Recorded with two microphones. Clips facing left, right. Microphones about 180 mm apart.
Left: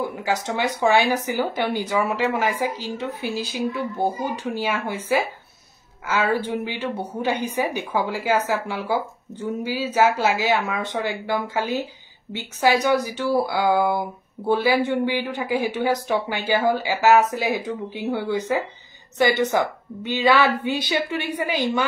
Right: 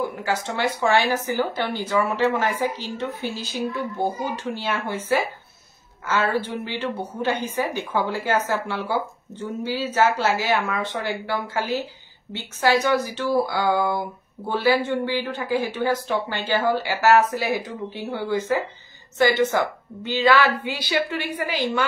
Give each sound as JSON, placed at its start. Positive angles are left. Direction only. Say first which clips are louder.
{"t": 0.2, "sound": "a woman's voice", "louder": "left 1 dB", "side_deg": 15}